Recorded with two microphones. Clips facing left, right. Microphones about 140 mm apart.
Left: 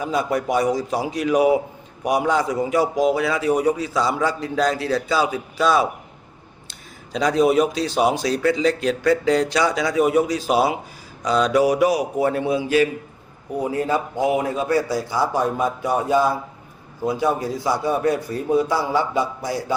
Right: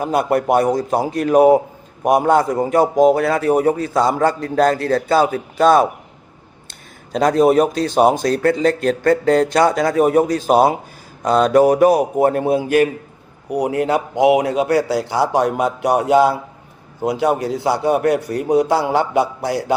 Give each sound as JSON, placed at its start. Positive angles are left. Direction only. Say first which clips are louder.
{"t": 0.0, "sound": "speech", "louder": "right 5 dB", "side_deg": -60}
{"t": 13.5, "sound": "a man's voice", "louder": "right 4 dB", "side_deg": -70}